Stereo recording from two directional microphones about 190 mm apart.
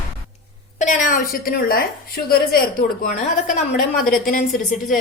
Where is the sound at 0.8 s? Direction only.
40° left (ahead or behind).